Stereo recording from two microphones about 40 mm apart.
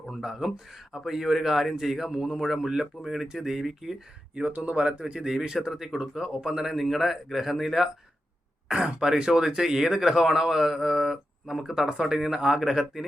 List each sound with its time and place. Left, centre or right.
0.1 s speech: centre
4.4 s speech: right
5.2 s speech: centre
8.6 s speech: right